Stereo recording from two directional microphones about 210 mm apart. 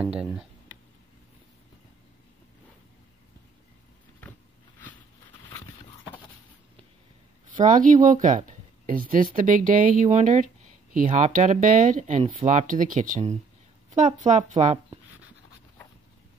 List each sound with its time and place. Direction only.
0.2 s speech: 5° right (ahead or behind)
7.6 s speech: 40° right (ahead or behind)